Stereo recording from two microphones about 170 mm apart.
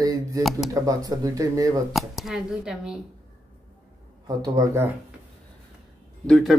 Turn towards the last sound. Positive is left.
turn(degrees=0)  # may be behind; listen again after turning